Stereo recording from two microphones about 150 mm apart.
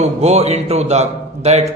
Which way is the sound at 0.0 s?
45° right (ahead or behind).